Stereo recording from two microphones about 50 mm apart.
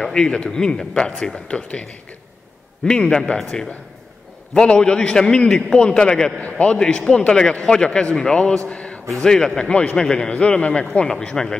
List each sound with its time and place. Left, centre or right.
0.0 s a man's voice: centre